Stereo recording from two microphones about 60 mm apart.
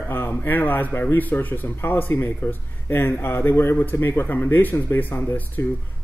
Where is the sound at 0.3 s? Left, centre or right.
Left.